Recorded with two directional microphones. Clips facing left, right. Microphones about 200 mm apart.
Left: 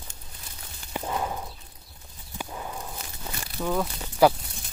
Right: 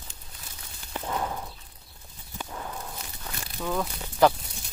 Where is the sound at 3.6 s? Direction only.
5° left (ahead or behind).